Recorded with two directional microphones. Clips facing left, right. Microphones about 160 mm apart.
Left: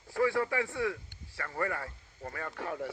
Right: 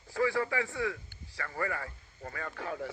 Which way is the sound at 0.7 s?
Centre (ahead or behind).